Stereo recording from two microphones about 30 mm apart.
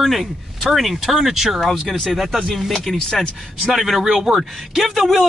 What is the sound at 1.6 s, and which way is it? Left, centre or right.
A man's voice, centre.